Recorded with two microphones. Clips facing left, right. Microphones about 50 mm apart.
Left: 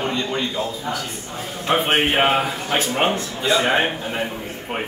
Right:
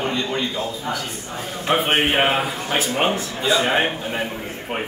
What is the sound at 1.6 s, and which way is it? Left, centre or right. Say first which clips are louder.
Speech: even; centre.